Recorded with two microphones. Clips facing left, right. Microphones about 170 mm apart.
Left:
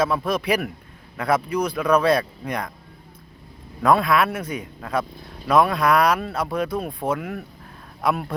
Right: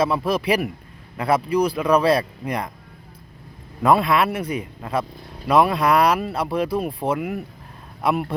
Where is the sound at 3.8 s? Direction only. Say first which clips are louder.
Right 1 dB; centre (ahead or behind).